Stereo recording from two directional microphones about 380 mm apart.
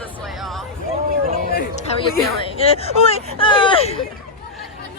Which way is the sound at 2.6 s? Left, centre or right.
Centre.